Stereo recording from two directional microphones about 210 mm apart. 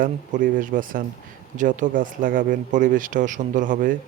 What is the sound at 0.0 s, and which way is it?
Speech, 40° right (ahead or behind).